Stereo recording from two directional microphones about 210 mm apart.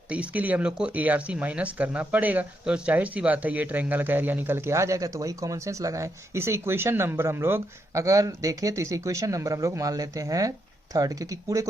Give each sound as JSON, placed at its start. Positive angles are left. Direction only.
{"t": 0.1, "sound": "speech", "side_deg": -5}